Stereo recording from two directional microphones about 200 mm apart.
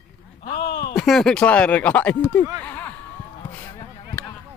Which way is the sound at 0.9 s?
Centre (ahead or behind).